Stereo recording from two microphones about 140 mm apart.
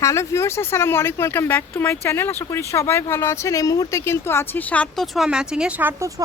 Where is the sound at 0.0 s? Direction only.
20° left (ahead or behind); by 6.1 s 10° right (ahead or behind).